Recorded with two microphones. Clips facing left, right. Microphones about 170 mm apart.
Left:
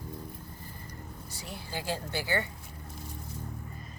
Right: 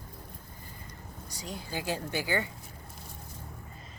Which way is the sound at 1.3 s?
15° right (ahead or behind).